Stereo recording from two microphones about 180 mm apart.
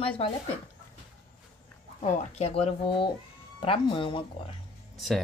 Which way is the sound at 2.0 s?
35° left (ahead or behind).